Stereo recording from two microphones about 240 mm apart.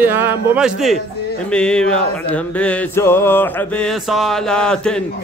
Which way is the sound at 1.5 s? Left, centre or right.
Centre.